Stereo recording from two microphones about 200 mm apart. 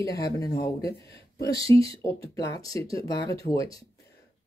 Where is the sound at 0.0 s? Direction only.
15° left (ahead or behind).